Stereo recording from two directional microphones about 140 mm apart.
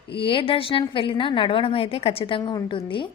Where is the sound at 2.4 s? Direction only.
30° left (ahead or behind).